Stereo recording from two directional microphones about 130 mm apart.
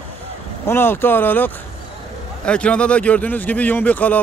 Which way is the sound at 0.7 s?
15° left (ahead or behind).